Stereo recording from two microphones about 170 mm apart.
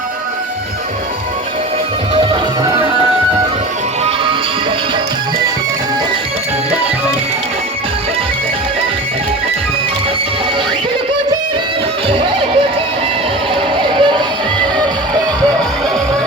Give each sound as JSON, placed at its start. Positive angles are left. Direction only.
{"t": 2.1, "sound": "music", "side_deg": -30}
{"t": 12.0, "sound": "music", "side_deg": -30}
{"t": 13.7, "sound": "music", "side_deg": -30}